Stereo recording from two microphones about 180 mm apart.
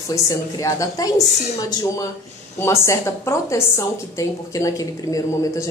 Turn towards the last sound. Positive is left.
turn(degrees=20)  # may be behind; listen again after turning